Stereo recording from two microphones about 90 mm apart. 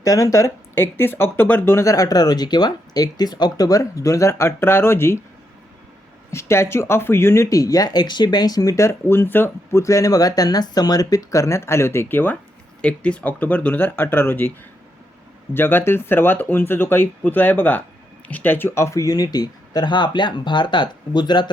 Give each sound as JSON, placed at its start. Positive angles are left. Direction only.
{"t": 0.0, "sound": "speech", "side_deg": 40}
{"t": 0.8, "sound": "speech", "side_deg": 25}
{"t": 6.3, "sound": "speech", "side_deg": 30}
{"t": 9.8, "sound": "speech", "side_deg": 40}
{"t": 15.5, "sound": "speech", "side_deg": 25}